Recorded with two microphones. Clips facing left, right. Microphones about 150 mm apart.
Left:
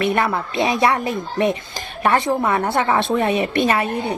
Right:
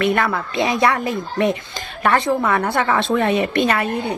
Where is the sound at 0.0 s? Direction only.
20° left (ahead or behind).